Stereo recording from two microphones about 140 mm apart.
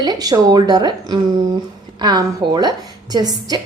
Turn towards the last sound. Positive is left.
turn(degrees=-30)  # may be behind; listen again after turning